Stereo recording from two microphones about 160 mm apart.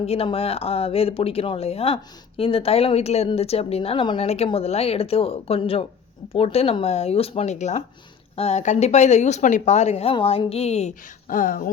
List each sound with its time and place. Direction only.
0.0 s speech: 40° left (ahead or behind)
11.3 s speech: 60° left (ahead or behind)